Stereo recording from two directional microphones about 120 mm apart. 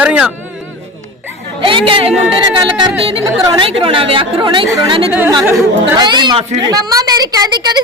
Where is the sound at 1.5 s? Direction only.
45° right (ahead or behind).